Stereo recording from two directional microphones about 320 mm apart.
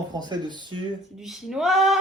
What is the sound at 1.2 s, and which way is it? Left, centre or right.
Speech, centre.